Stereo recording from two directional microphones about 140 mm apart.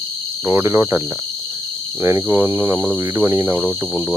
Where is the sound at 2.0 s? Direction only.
20° right (ahead or behind).